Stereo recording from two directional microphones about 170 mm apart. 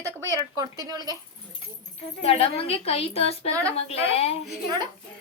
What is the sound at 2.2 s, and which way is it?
A woman's voice, 35° left (ahead or behind).